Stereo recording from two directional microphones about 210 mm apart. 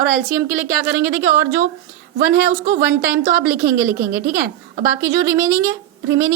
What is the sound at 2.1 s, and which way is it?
Speech, 40° right (ahead or behind).